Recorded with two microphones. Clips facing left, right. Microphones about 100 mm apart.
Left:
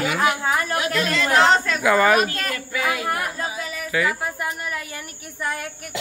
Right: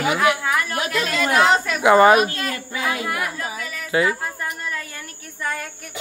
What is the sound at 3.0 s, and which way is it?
Speech, 40° left (ahead or behind).